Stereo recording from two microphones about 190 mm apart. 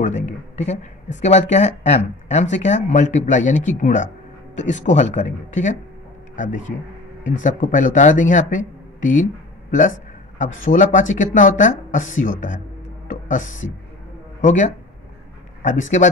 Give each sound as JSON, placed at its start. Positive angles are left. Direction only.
{"t": 0.0, "sound": "a man's voice", "side_deg": 40}
{"t": 13.1, "sound": "music", "side_deg": 40}
{"t": 14.4, "sound": "speech", "side_deg": 40}